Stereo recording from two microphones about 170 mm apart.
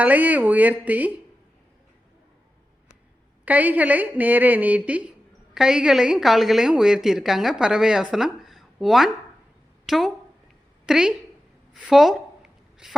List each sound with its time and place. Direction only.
0.0 s a woman's voice: 10° right (ahead or behind)
3.4 s a woman's voice: 10° right (ahead or behind)
11.7 s a sound: centre (ahead or behind)